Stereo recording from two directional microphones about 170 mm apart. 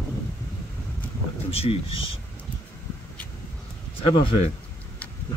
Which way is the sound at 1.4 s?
35° left (ahead or behind).